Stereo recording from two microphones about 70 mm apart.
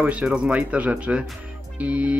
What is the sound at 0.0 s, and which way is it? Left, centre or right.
Speech, right.